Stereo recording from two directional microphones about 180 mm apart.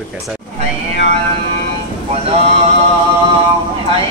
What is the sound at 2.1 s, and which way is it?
Speech, 35° right (ahead or behind).